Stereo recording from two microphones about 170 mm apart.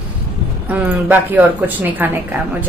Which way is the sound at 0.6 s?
10° right (ahead or behind).